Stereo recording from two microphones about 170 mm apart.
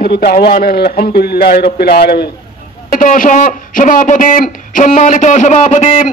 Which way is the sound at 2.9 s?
50° left (ahead or behind).